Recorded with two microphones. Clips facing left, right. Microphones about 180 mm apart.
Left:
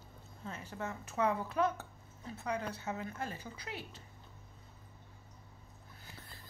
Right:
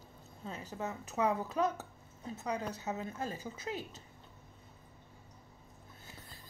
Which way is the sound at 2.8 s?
20° right (ahead or behind).